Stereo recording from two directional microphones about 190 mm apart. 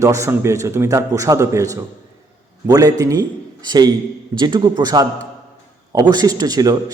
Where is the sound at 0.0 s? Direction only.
15° right (ahead or behind).